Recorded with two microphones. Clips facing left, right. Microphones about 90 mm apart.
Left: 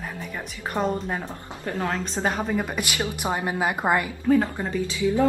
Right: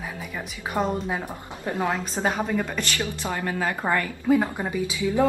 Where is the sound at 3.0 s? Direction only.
20° left (ahead or behind).